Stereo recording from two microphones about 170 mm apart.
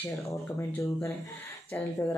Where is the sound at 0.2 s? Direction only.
15° left (ahead or behind).